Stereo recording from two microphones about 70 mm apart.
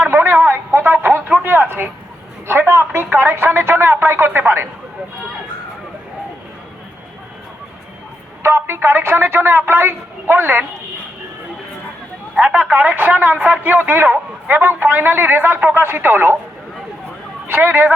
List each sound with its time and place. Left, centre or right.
0.0 s a sound: right
2.5 s a woman's voice: right
8.4 s a woman's voice: right
12.4 s a man's voice: right
17.5 s a man's voice: right